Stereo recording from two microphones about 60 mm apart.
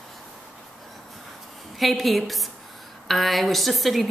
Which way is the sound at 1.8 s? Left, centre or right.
Centre.